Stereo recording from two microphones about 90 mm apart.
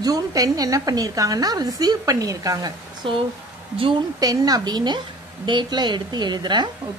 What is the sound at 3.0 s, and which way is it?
Speech, 70° right (ahead or behind).